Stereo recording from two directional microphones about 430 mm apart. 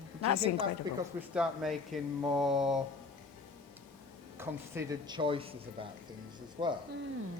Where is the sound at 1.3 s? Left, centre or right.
Centre.